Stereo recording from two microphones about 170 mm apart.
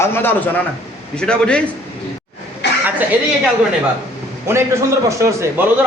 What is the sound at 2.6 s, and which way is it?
Chuckle, 85° left.